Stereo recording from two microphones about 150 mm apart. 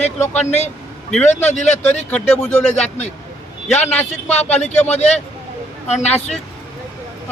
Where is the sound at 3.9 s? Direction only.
10° left (ahead or behind).